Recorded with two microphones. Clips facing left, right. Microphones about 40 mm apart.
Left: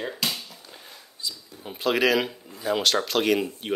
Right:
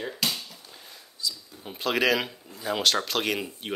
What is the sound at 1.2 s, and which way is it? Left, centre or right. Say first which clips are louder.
Speech: right 2 dB; left.